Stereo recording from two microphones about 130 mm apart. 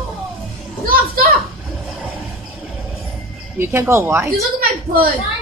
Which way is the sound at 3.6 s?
20° right (ahead or behind).